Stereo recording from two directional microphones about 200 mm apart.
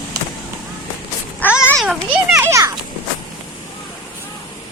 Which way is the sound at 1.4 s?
10° left (ahead or behind).